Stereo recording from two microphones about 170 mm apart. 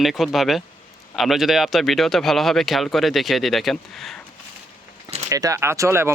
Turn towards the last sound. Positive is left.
turn(degrees=-15)  # may be behind; listen again after turning